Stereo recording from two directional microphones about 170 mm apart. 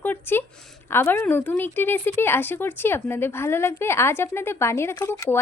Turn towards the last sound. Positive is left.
turn(degrees=15)  # may be behind; listen again after turning